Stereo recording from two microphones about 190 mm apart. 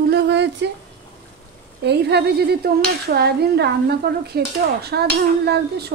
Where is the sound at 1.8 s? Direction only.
60° right (ahead or behind).